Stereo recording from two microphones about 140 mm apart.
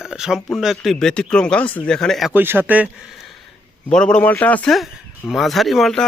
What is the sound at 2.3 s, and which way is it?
Speech, 15° right (ahead or behind).